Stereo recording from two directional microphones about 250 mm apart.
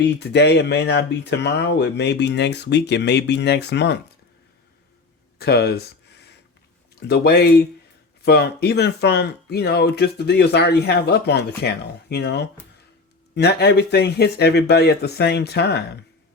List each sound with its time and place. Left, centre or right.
0.0 s speech: left
5.4 s speech: left
7.1 s speech: left